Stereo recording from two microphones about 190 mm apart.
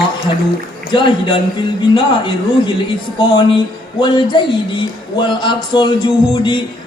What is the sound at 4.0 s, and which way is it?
Speech, 25° left (ahead or behind).